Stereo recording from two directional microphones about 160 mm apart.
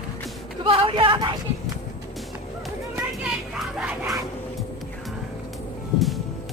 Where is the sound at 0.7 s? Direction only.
35° right (ahead or behind).